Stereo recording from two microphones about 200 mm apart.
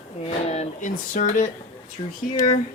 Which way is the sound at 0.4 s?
35° left (ahead or behind).